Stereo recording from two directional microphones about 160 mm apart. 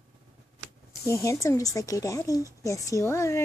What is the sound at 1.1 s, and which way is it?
Speech, 20° left (ahead or behind).